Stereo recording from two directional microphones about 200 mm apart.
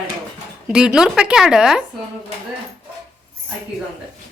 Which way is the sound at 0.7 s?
5° right (ahead or behind).